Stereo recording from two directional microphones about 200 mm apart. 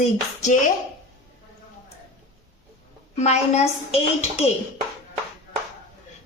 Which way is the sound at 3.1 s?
35° left (ahead or behind).